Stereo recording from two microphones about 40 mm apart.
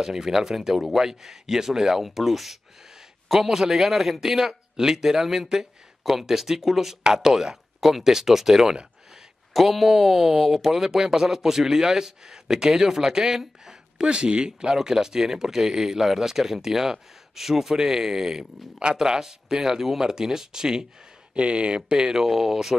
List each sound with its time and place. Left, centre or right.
0.0 s speech: centre
14.0 s speech: right
21.4 s speech: right; by 22.8 s centre